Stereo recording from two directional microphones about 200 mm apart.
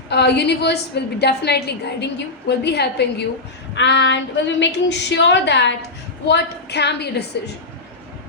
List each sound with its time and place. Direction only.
0.1 s a woman's voice: 55° left (ahead or behind)